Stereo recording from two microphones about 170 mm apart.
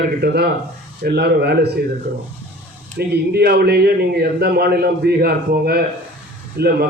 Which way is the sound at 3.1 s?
70° right (ahead or behind).